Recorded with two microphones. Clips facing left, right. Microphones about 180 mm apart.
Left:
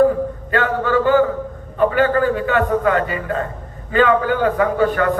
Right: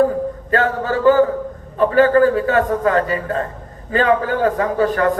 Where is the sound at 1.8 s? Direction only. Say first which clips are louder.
Right 3 dB; 35° right (ahead or behind).